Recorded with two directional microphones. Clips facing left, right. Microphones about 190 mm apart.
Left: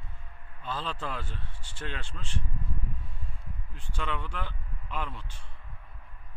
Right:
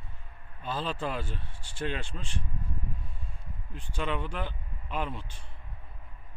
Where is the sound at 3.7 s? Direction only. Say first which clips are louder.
Right 3 dB; 15° right (ahead or behind).